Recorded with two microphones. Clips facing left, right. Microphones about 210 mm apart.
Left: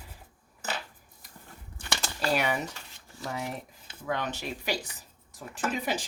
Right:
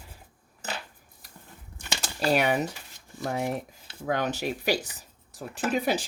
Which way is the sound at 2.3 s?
55° right (ahead or behind).